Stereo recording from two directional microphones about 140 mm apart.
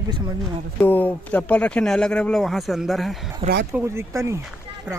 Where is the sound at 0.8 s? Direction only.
15° left (ahead or behind).